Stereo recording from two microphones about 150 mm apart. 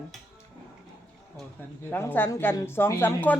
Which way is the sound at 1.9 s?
15° left (ahead or behind).